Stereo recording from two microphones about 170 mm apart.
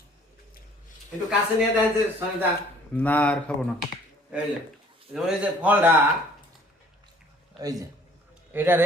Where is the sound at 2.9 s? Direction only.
10° left (ahead or behind).